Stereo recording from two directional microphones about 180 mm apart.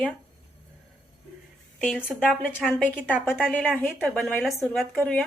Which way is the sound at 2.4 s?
5° left (ahead or behind).